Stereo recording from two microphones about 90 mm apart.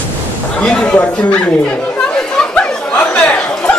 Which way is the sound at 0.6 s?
10° left (ahead or behind).